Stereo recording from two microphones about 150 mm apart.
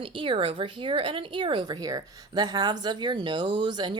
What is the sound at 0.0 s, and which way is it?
A woman's voice, 35° right (ahead or behind).